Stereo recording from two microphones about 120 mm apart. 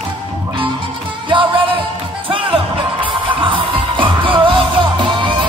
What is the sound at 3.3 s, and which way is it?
Music, 45° right (ahead or behind).